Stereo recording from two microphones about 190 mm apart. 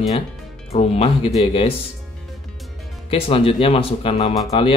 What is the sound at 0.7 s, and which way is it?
Speech, 35° left (ahead or behind).